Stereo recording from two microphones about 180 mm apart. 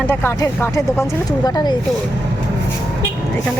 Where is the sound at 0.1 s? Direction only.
15° left (ahead or behind).